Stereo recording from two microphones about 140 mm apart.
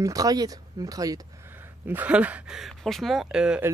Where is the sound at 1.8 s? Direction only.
10° right (ahead or behind).